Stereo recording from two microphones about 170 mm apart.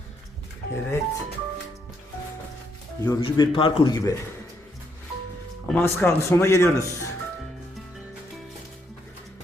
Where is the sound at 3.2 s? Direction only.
25° left (ahead or behind).